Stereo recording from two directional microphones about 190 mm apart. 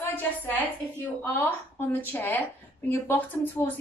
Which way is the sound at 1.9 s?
10° left (ahead or behind).